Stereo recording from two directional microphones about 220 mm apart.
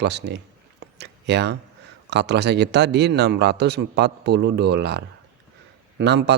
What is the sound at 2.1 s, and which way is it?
A man's voice, 50° right (ahead or behind).